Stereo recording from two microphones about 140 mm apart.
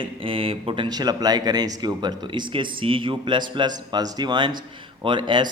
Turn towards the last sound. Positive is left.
turn(degrees=-35)  # may be behind; listen again after turning